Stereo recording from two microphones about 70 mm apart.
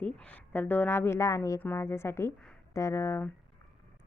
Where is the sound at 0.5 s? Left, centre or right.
Left.